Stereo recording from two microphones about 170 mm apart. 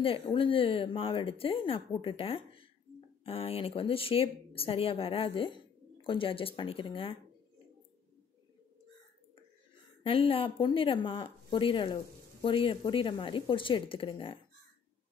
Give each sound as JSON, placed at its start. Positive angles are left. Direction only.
{"t": 0.0, "sound": "speech", "side_deg": 30}
{"t": 10.0, "sound": "speech", "side_deg": 30}